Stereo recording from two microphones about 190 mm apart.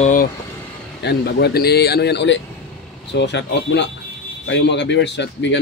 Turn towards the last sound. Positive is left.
turn(degrees=65)  # may be behind; listen again after turning